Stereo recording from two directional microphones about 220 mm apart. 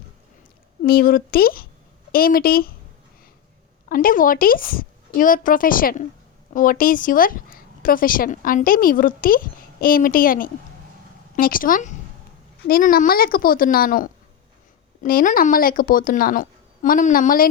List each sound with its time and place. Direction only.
0.8 s speech: 40° left (ahead or behind)
3.8 s speech: 40° left (ahead or behind)